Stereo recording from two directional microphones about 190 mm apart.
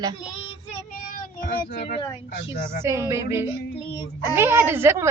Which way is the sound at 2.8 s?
15° right (ahead or behind).